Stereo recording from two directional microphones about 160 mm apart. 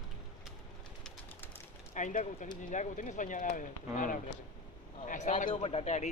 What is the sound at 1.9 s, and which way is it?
A man's voice, 50° left (ahead or behind).